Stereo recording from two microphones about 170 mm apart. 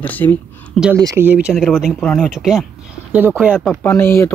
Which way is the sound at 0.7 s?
5° right (ahead or behind).